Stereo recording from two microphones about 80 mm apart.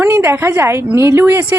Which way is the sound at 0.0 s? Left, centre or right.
Right.